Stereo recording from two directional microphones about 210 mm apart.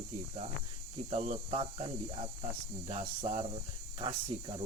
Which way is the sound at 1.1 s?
30° right (ahead or behind).